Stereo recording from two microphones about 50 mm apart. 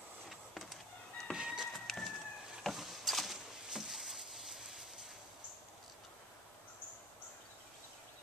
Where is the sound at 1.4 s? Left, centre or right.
Centre.